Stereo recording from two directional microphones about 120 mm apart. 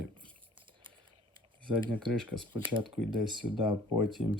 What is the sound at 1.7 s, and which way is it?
Speech, 40° right (ahead or behind).